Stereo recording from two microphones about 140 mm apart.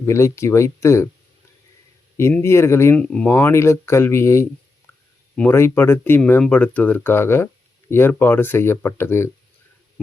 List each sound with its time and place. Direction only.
0.0 s speech: 20° left (ahead or behind)
2.1 s speech: 20° left (ahead or behind)
2.9 s speech: 10° left (ahead or behind)